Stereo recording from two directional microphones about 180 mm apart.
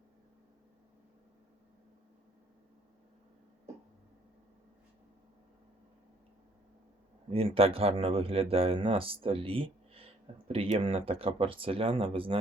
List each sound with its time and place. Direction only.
7.3 s speech: 30° right (ahead or behind)